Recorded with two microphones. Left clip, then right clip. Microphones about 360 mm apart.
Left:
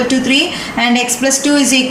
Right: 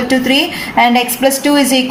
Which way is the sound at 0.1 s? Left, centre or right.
Right.